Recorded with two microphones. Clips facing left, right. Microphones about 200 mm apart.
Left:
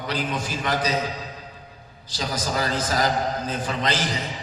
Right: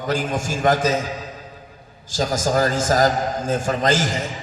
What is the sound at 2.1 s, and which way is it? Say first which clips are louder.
A man's voice: right 7 dB; 45° right (ahead or behind).